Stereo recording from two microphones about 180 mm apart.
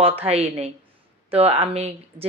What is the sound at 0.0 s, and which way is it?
Speech, 35° right (ahead or behind).